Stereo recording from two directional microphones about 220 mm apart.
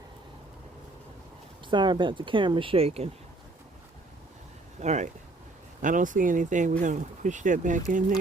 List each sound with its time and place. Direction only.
1.7 s speech: 20° right (ahead or behind)
4.8 s speech: 30° right (ahead or behind)